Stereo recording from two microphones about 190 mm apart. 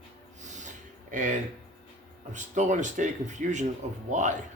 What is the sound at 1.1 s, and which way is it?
A man's voice, 40° right (ahead or behind).